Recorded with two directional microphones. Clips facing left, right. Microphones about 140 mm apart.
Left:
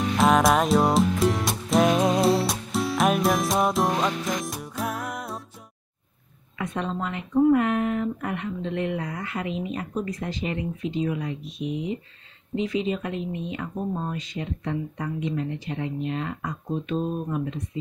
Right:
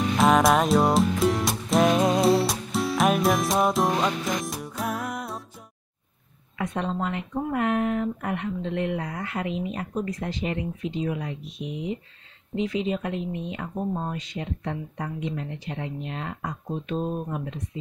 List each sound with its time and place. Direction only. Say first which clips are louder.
0.2 s music: even; centre (ahead or behind)
6.6 s a sound: right 1 dB; 30° right (ahead or behind)
7.6 s speech: even; 45° right (ahead or behind)
11.1 s speech: left 1 dB; 40° right (ahead or behind)
11.6 s speech: left 5 dB; 5° right (ahead or behind)
12.5 s speech: left 1 dB; 60° right (ahead or behind)
13.7 s speech: right 1 dB; 15° right (ahead or behind)
14.1 s speech: left 1 dB; 65° right (ahead or behind)
14.6 s speech: left 2 dB; 35° right (ahead or behind)
16.9 s speech: left 1 dB; 20° right (ahead or behind)